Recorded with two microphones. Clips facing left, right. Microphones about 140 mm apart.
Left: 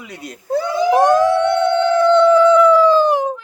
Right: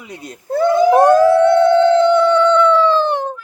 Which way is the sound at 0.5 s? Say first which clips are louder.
Right 5 dB; 55° right (ahead or behind).